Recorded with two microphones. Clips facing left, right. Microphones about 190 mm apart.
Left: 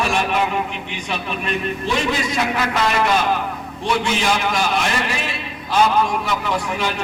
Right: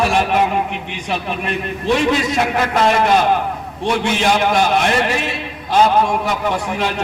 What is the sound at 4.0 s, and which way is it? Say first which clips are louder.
A man's voice: right 4 dB; 60° right (ahead or behind).